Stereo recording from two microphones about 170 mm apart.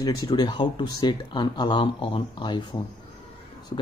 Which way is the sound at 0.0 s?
25° left (ahead or behind).